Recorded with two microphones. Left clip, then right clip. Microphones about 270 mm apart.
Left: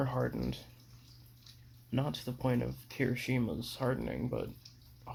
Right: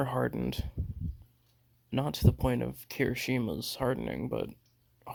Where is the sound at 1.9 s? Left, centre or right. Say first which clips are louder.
Right 5 dB; right.